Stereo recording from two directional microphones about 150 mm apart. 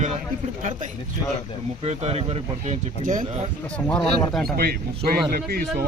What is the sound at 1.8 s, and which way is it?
Speech, 45° right (ahead or behind).